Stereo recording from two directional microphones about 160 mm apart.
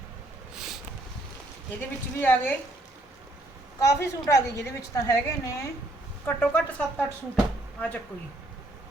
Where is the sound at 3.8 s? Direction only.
20° left (ahead or behind).